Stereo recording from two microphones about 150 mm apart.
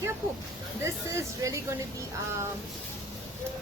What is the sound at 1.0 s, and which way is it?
Speech, 20° right (ahead or behind).